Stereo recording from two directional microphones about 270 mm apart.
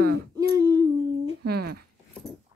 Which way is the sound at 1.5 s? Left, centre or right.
Right.